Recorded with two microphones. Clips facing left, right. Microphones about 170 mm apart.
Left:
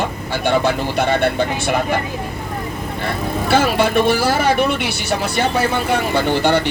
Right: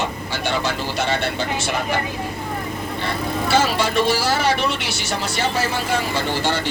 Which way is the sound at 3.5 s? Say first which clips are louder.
Left 4 dB; 55° left (ahead or behind).